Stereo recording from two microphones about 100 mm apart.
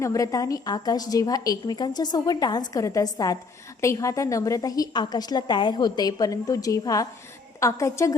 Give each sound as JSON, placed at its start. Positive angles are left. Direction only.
{"t": 0.0, "sound": "a woman's voice", "side_deg": 35}